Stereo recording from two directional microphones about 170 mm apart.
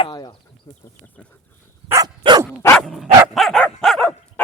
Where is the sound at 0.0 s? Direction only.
25° left (ahead or behind).